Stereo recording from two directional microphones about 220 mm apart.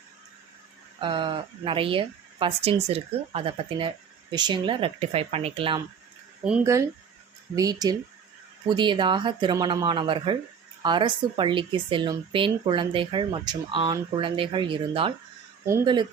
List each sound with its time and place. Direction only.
0.9 s speech: 20° right (ahead or behind)
6.4 s speech: 10° right (ahead or behind)